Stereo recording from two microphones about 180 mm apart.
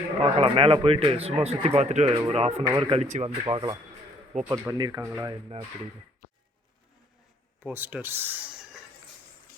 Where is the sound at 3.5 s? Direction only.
25° right (ahead or behind).